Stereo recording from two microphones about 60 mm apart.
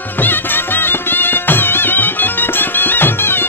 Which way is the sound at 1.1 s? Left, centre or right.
Left.